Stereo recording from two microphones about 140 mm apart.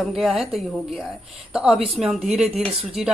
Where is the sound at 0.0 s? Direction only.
Centre (ahead or behind).